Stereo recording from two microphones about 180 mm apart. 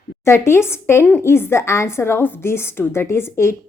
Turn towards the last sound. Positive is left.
turn(degrees=15)  # may be behind; listen again after turning